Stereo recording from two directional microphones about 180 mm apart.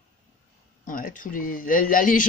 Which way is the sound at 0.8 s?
50° left (ahead or behind).